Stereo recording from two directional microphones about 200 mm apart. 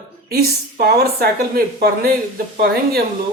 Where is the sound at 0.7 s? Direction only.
50° right (ahead or behind).